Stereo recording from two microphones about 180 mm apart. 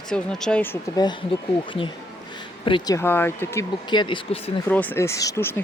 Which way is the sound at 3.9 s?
25° left (ahead or behind).